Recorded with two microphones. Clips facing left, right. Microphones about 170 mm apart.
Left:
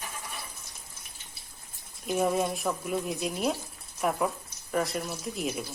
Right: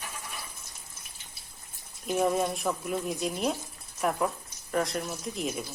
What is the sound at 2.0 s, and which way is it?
A woman's voice, centre (ahead or behind).